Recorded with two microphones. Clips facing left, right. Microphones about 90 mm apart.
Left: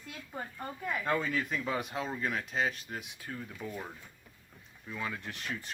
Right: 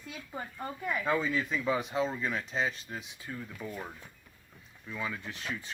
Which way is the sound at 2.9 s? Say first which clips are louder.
Even; 60° left (ahead or behind).